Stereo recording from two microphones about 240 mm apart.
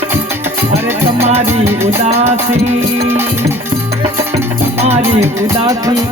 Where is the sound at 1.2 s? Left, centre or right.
Right.